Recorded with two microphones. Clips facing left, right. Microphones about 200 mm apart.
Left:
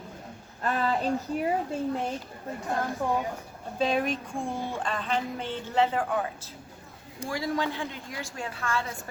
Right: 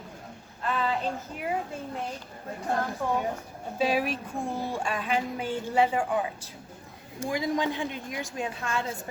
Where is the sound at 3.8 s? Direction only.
5° right (ahead or behind).